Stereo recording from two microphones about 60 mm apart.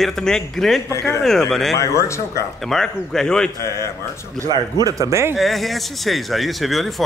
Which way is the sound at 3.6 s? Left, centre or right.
Left.